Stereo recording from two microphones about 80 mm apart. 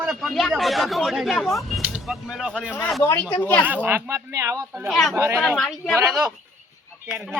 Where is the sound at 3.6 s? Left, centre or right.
Right.